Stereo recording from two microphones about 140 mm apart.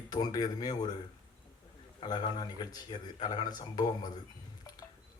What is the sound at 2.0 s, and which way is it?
A man's voice, 30° left (ahead or behind).